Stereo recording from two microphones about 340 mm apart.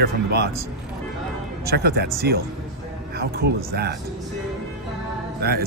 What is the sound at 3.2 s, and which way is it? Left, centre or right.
Speech, right.